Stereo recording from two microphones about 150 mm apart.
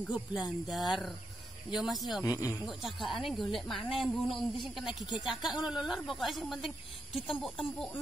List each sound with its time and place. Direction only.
0.1 s speech: 5° right (ahead or behind)
2.2 s speech: 25° left (ahead or behind)
2.6 s speech: centre (ahead or behind)